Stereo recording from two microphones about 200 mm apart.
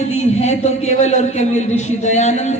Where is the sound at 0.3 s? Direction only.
35° left (ahead or behind).